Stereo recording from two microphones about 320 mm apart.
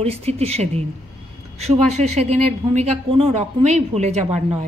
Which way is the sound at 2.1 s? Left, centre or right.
Right.